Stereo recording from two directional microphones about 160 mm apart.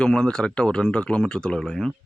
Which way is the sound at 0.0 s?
5° left (ahead or behind).